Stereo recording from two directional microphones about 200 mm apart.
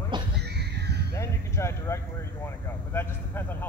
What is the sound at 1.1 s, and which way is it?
Speech, 15° left (ahead or behind).